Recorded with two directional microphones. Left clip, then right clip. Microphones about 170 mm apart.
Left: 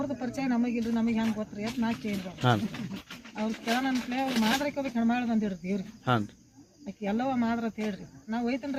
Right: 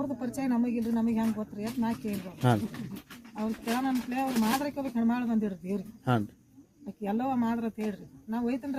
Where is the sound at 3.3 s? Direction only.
5° right (ahead or behind).